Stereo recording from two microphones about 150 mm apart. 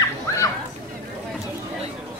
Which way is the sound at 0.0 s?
20° left (ahead or behind).